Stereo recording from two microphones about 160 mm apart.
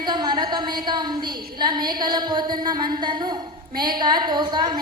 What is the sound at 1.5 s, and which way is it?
A woman's voice, 30° right (ahead or behind).